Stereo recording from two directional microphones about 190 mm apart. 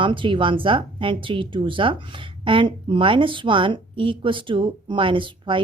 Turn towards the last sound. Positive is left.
turn(degrees=-25)  # may be behind; listen again after turning